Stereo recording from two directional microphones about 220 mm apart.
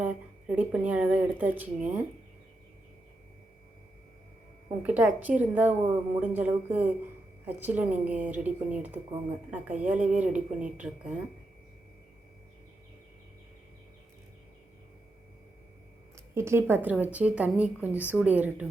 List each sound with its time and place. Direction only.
0.0 s speech: 5° right (ahead or behind)
4.8 s speech: 5° right (ahead or behind)
16.3 s speech: 10° right (ahead or behind)